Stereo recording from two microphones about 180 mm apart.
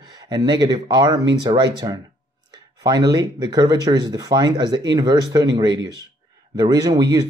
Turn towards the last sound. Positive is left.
turn(degrees=-20)  # may be behind; listen again after turning